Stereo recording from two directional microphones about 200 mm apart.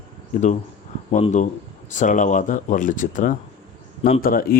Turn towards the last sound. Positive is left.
turn(degrees=45)  # may be behind; listen again after turning